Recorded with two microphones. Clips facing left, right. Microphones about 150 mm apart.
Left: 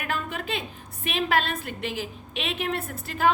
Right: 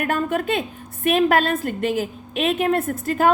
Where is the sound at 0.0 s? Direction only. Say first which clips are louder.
Right 9 dB; 45° right (ahead or behind).